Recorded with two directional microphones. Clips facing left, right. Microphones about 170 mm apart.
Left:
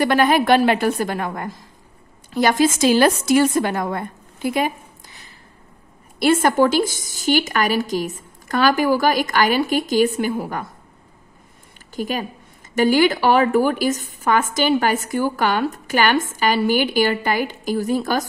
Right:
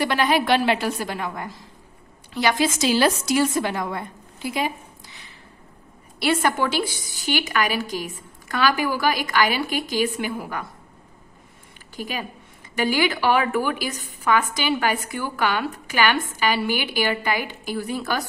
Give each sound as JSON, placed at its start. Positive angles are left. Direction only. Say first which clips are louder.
{"t": 0.0, "sound": "a woman's voice", "louder": "left 5 dB", "side_deg": 50}
{"t": 11.9, "sound": "a woman's voice", "louder": "left 6 dB", "side_deg": 45}